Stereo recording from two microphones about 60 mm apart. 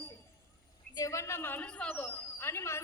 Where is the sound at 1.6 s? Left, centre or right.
Centre.